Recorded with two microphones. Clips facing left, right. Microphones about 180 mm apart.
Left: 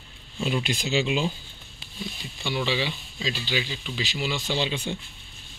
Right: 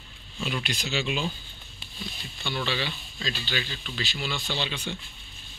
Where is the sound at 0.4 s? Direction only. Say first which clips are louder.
Left 5 dB; 25° left (ahead or behind).